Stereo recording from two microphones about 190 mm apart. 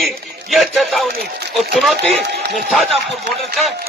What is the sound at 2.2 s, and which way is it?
Speech, 60° right (ahead or behind).